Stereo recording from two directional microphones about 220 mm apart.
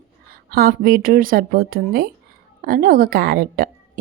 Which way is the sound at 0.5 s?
45° right (ahead or behind).